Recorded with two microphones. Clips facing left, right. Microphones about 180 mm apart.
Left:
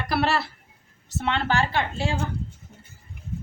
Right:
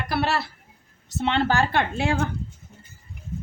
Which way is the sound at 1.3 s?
35° right (ahead or behind).